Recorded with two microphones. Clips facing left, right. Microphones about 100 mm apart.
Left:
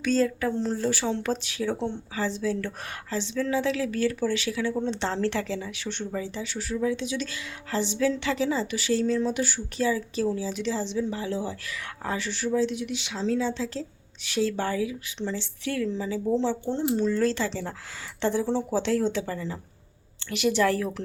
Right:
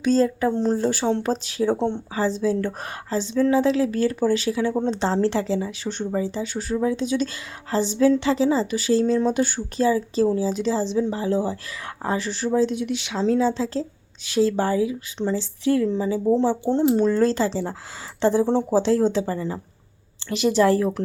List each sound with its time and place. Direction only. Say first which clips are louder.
0.0 s speech: right 5 dB; 30° right (ahead or behind)
0.5 s speech: right 5 dB; 40° right (ahead or behind)
12.9 s speech: right 6 dB; 60° right (ahead or behind); by 15.9 s 30° right (ahead or behind)
16.4 s speech: right 7 dB; 50° right (ahead or behind)
17.2 s speech: right 5 dB; 35° right (ahead or behind)